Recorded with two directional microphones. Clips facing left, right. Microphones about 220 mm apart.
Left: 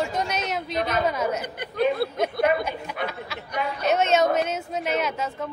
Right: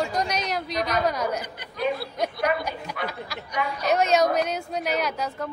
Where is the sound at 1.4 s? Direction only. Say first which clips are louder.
Left 4 dB; 55° left (ahead or behind).